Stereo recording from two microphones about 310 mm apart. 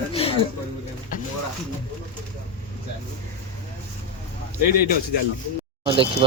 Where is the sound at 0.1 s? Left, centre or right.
Centre.